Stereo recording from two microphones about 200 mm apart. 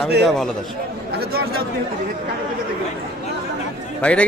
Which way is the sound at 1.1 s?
50° right (ahead or behind).